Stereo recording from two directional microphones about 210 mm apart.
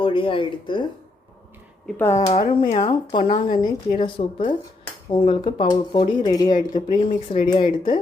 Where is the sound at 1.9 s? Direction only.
10° left (ahead or behind).